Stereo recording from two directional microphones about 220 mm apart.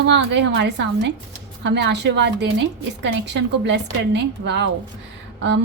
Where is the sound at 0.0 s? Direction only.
50° right (ahead or behind).